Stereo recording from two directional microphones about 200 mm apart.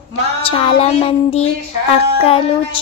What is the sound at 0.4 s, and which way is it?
Child singing, 25° left (ahead or behind).